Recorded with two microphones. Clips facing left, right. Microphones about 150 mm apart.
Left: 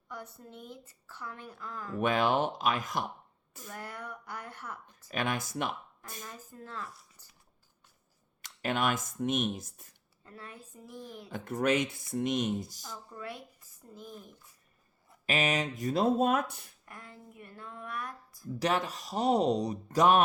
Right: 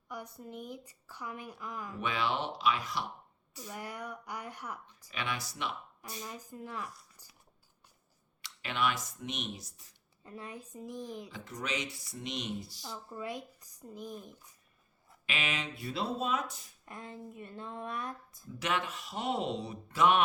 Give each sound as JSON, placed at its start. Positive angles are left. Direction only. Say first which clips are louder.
{"t": 0.1, "sound": "speech", "louder": "right 2 dB", "side_deg": -10}
{"t": 2.0, "sound": "speech", "louder": "left 7 dB", "side_deg": 50}
{"t": 3.7, "sound": "speech", "louder": "right 1 dB", "side_deg": -15}
{"t": 5.1, "sound": "speech", "louder": "left 6 dB", "side_deg": 50}
{"t": 6.2, "sound": "speech", "louder": "right 3 dB", "side_deg": -15}
{"t": 7.2, "sound": "a sound", "louder": "right 1 dB", "side_deg": -10}
{"t": 8.4, "sound": "speech", "louder": "left 3 dB", "side_deg": 45}
{"t": 10.2, "sound": "speech", "louder": "right 3 dB", "side_deg": -15}
{"t": 11.3, "sound": "speech", "louder": "left 10 dB", "side_deg": 50}
{"t": 12.8, "sound": "speech", "louder": "right 2 dB", "side_deg": -20}
{"t": 15.3, "sound": "speech", "louder": "left 7 dB", "side_deg": 40}
{"t": 16.8, "sound": "speech", "louder": "right 6 dB", "side_deg": -20}
{"t": 18.4, "sound": "speech", "louder": "left 4 dB", "side_deg": 35}